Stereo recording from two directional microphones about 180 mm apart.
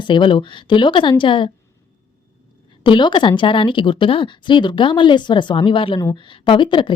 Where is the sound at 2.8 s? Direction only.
25° left (ahead or behind).